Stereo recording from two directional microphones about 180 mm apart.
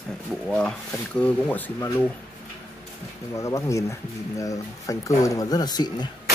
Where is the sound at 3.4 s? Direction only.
15° left (ahead or behind).